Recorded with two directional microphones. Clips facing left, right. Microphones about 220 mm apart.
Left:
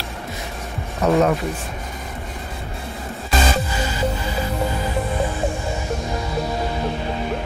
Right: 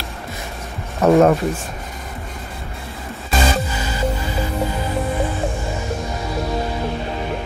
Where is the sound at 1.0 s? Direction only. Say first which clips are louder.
Right 4 dB; 55° right (ahead or behind).